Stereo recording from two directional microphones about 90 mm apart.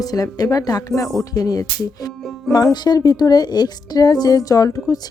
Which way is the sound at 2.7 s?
50° left (ahead or behind).